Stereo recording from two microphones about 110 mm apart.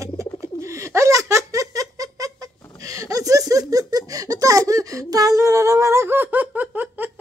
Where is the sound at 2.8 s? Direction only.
30° right (ahead or behind).